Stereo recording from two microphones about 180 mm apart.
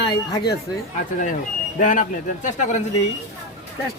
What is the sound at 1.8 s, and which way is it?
Speech, 45° left (ahead or behind).